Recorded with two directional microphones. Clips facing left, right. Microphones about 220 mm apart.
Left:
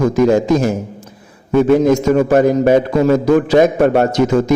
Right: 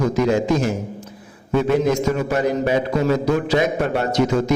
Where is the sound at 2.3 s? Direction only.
50° left (ahead or behind).